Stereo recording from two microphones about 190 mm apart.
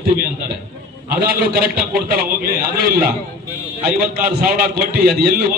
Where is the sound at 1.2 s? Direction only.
50° right (ahead or behind).